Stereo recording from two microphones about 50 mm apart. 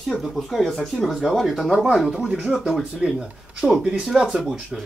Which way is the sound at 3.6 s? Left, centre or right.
Centre.